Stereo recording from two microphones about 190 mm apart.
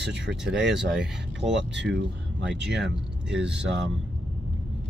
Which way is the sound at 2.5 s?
70° right (ahead or behind).